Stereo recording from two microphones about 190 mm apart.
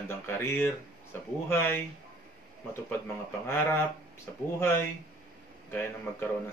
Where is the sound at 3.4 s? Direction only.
15° left (ahead or behind).